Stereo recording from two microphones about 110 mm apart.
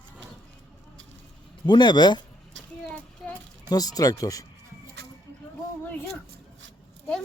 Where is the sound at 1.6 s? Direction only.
40° left (ahead or behind).